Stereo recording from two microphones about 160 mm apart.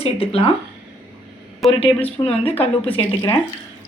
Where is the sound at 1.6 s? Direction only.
Centre (ahead or behind).